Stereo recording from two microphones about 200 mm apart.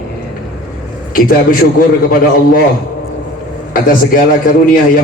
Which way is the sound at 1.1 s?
45° left (ahead or behind).